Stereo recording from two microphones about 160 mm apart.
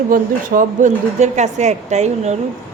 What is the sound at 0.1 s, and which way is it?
A man's voice, 55° right (ahead or behind).